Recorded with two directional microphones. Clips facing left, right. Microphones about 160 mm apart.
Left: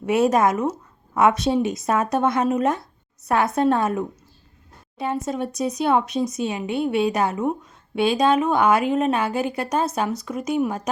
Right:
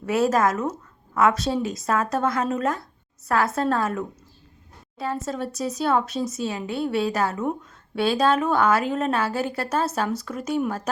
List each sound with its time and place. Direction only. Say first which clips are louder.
0.0 s a woman's voice: left 2 dB; 20° left (ahead or behind)